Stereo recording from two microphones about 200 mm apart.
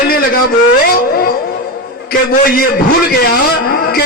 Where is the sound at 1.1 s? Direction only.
50° left (ahead or behind).